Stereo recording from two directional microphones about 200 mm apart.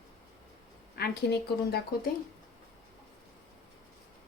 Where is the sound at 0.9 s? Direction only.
50° left (ahead or behind).